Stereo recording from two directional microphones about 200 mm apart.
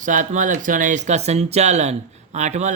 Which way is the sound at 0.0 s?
40° right (ahead or behind).